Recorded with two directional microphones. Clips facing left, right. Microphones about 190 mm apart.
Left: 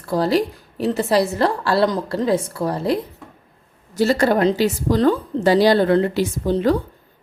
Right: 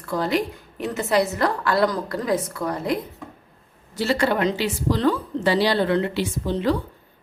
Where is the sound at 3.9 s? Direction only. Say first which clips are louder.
Left 5 dB; 45° left (ahead or behind).